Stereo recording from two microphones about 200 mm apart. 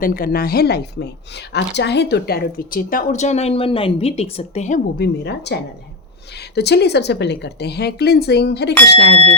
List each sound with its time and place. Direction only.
0.0 s a woman's voice: 45° left (ahead or behind)
4.9 s speech: 55° left (ahead or behind)